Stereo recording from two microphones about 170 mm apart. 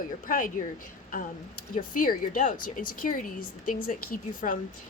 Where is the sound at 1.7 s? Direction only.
50° left (ahead or behind).